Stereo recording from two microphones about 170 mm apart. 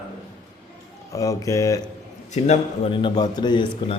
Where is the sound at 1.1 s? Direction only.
20° left (ahead or behind).